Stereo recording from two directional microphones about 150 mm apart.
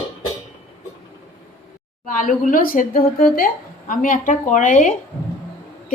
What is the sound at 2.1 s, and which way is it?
Speech, 65° left (ahead or behind).